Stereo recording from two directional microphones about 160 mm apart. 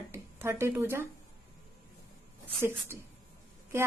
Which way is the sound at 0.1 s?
15° right (ahead or behind).